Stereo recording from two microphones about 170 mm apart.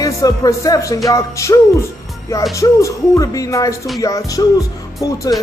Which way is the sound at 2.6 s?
20° left (ahead or behind).